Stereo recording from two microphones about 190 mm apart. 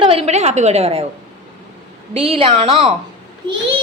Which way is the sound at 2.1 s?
30° right (ahead or behind).